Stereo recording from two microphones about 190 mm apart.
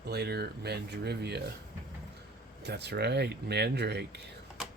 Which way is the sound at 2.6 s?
60° right (ahead or behind).